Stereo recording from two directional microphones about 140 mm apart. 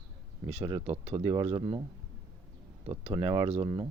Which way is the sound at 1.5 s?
35° right (ahead or behind).